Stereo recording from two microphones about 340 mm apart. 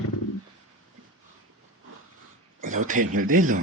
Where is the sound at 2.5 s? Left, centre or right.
Right.